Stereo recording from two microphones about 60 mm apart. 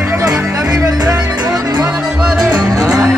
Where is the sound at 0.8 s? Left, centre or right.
Right.